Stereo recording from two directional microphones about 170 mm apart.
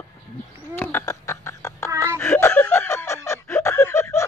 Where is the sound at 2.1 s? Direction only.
10° left (ahead or behind).